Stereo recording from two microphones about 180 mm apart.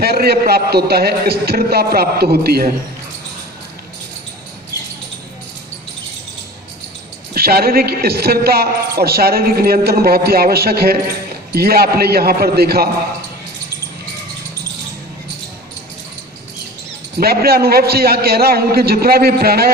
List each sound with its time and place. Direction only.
0.0 s a woman's voice: 60° right (ahead or behind)
7.3 s a woman's voice: 60° right (ahead or behind)
17.2 s a woman's voice: 60° right (ahead or behind)